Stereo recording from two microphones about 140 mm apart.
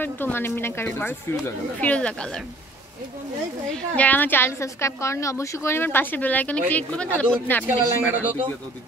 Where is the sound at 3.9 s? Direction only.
10° left (ahead or behind).